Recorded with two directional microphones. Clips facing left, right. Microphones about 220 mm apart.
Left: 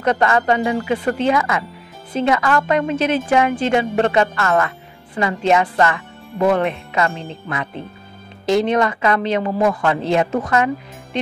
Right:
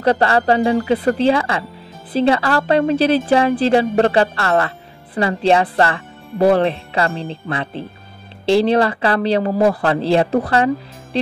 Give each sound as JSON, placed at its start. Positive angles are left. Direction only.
{"t": 0.0, "sound": "speech", "side_deg": -35}